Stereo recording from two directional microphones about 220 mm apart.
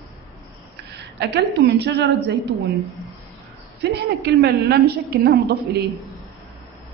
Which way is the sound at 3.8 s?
50° right (ahead or behind).